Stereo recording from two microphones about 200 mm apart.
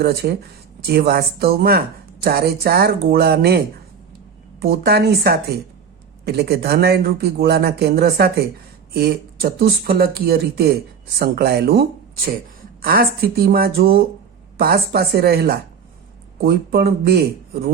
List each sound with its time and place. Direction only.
0.0 s speech: 50° right (ahead or behind)
4.6 s speech: 50° right (ahead or behind)